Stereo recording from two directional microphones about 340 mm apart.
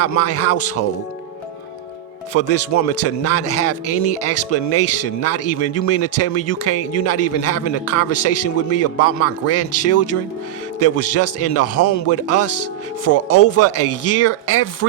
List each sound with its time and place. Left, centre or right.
0.0 s a man's voice: left
2.3 s speech: left